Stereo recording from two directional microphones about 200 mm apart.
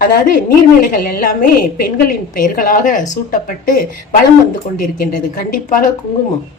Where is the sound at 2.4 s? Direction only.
45° left (ahead or behind).